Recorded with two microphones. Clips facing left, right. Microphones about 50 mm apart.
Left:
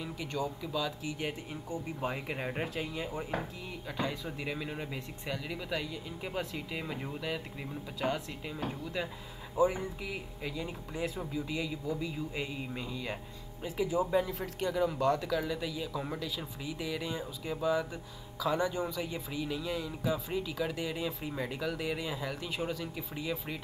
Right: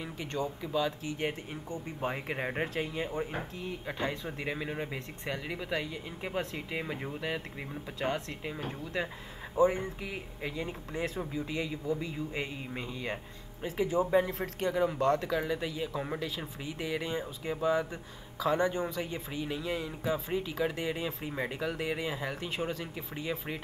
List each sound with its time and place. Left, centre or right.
0.0 s speech: right